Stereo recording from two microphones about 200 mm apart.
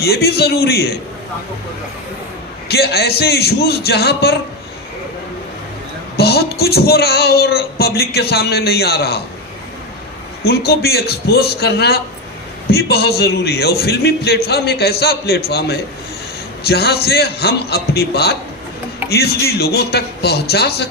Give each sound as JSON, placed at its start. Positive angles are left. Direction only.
{"t": 0.0, "sound": "speech", "side_deg": 55}
{"t": 2.6, "sound": "speech", "side_deg": 55}
{"t": 6.1, "sound": "speech", "side_deg": 55}
{"t": 10.4, "sound": "speech", "side_deg": 50}